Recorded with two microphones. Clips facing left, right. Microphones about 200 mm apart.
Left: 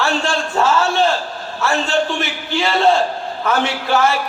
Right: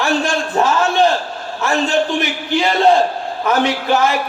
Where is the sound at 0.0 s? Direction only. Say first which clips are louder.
Right 2 dB; 15° right (ahead or behind).